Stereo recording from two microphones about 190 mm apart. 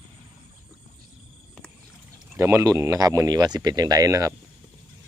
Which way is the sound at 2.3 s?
15° right (ahead or behind).